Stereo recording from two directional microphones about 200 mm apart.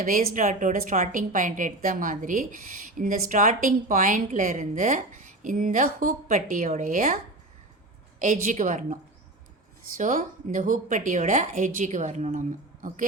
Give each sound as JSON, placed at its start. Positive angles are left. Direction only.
{"t": 0.3, "sound": "a woman's voice", "side_deg": -40}
{"t": 8.2, "sound": "a woman's voice", "side_deg": -40}
{"t": 10.0, "sound": "a woman's voice", "side_deg": -40}